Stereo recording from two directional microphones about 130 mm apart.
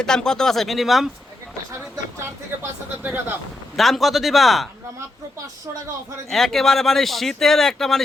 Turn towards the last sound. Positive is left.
turn(degrees=5)  # may be behind; listen again after turning